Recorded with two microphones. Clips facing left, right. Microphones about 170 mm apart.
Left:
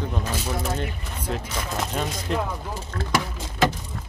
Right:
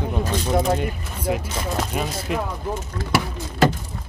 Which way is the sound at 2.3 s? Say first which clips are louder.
Even; 5° right (ahead or behind).